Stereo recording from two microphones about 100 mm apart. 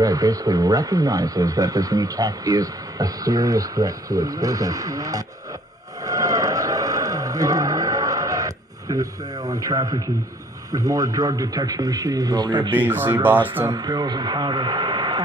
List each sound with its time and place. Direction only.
0.0 s speech: 35° right (ahead or behind)
6.0 s a sound: 35° right (ahead or behind)
10.7 s speech: 35° right (ahead or behind)
12.7 s speech: 20° right (ahead or behind)
13.7 s speech: 40° right (ahead or behind)